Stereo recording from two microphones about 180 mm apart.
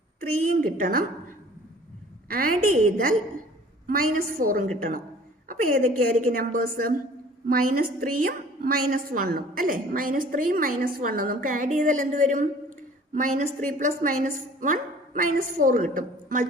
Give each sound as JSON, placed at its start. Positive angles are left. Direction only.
{"t": 0.2, "sound": "a woman's voice", "side_deg": -50}
{"t": 3.8, "sound": "a woman's voice", "side_deg": -50}